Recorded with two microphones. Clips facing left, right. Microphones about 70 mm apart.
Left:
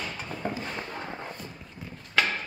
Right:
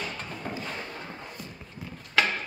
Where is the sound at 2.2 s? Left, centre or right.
Centre.